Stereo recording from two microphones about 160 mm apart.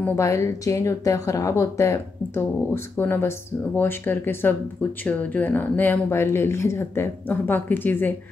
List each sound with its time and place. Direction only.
0.0 s speech: 15° left (ahead or behind)